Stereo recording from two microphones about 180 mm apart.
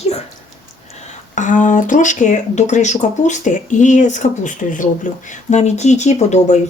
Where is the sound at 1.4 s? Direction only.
45° left (ahead or behind).